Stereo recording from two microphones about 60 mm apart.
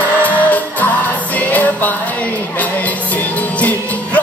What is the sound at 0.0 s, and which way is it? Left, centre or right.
Music, left.